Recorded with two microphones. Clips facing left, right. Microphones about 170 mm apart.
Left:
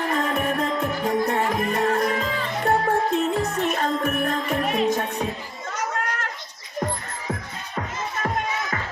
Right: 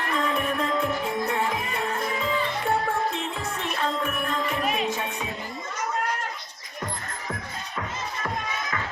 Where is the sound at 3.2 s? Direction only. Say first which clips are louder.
Left 8 dB; 45° left (ahead or behind).